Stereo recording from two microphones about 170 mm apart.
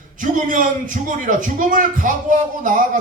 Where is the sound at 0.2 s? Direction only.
50° right (ahead or behind).